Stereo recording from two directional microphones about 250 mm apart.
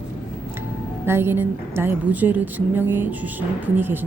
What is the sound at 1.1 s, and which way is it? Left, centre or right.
A woman's voice, centre.